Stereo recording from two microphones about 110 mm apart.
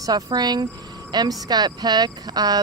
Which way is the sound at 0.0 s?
40° right (ahead or behind).